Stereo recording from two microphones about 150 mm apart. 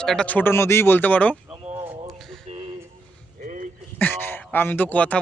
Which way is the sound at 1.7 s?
15° right (ahead or behind).